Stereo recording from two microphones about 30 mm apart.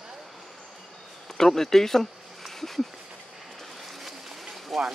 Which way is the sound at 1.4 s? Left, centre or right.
Centre.